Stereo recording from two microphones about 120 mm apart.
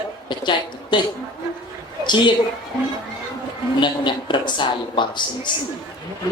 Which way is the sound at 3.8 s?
40° left (ahead or behind).